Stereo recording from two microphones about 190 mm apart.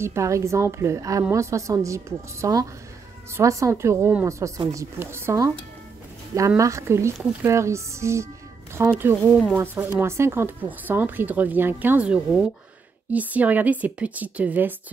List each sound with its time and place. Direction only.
0.0 s speech: 15° right (ahead or behind)